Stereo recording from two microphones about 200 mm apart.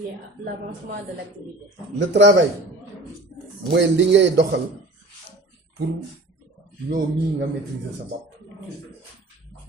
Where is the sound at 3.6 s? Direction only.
65° right (ahead or behind).